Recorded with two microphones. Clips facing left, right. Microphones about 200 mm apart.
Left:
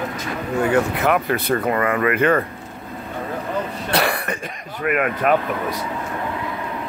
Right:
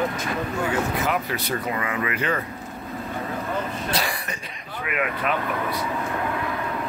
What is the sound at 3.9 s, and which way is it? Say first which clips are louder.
Throat clearing: left 9 dB; 60° left (ahead or behind).